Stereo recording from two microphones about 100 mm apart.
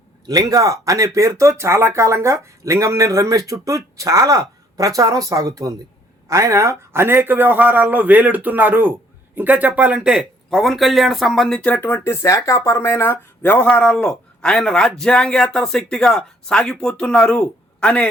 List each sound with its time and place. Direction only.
0.3 s a man's voice: 35° right (ahead or behind); by 11.6 s 5° left (ahead or behind)
11.6 s speech: 15° left (ahead or behind)
12.0 s speech: 30° left (ahead or behind); by 18.1 s 10° left (ahead or behind)